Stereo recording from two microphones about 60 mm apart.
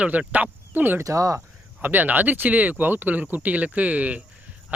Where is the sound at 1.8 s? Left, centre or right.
Right.